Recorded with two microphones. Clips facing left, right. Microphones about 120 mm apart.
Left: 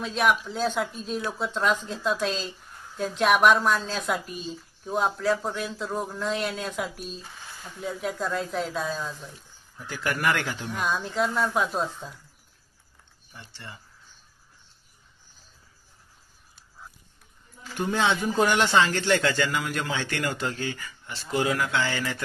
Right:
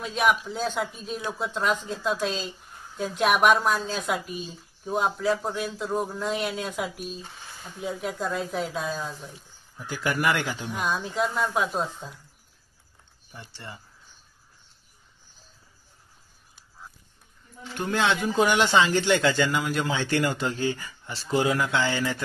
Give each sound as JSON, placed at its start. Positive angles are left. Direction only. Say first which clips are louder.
{"t": 0.0, "sound": "speech", "louder": "even", "side_deg": 0}
{"t": 17.7, "sound": "a man's voice", "louder": "even", "side_deg": 10}
{"t": 18.3, "sound": "a man's voice", "louder": "right 1 dB", "side_deg": -10}